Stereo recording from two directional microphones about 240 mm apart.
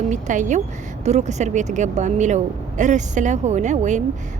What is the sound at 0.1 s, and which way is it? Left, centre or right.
Speech, right.